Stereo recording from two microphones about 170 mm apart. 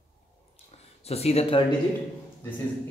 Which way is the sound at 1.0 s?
35° left (ahead or behind).